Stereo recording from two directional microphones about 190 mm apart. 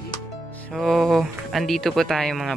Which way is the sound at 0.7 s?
Centre (ahead or behind).